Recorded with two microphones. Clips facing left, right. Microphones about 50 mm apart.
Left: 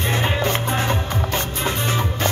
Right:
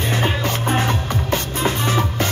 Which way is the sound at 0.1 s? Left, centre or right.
Left.